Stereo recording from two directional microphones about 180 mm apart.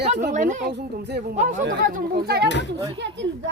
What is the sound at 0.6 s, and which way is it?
Speech, 65° right (ahead or behind).